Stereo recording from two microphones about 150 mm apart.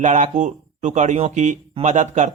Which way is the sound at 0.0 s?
55° right (ahead or behind).